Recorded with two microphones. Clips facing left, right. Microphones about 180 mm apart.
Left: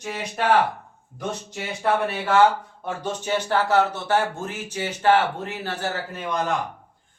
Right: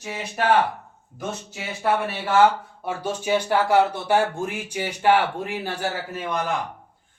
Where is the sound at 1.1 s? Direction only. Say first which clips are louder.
Left 1 dB; 5° right (ahead or behind).